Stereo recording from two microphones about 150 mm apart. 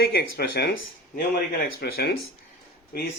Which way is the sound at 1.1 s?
75° left (ahead or behind).